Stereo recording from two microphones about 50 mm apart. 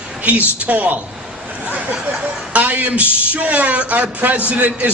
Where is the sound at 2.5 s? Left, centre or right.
Right.